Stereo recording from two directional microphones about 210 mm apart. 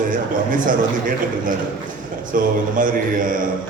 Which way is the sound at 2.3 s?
40° right (ahead or behind).